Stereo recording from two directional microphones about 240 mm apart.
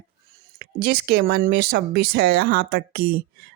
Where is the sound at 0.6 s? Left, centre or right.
Right.